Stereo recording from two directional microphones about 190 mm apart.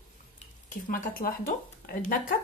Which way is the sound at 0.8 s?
45° left (ahead or behind).